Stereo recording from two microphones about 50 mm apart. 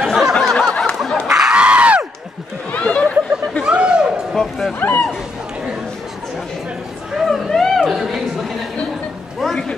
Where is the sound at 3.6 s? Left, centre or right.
Centre.